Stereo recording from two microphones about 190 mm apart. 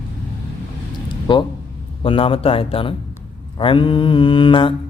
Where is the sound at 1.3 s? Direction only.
25° left (ahead or behind).